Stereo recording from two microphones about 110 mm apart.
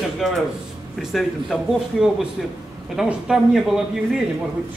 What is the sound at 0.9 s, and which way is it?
A man's voice, centre (ahead or behind).